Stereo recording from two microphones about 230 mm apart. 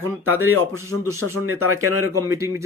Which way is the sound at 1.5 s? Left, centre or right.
Right.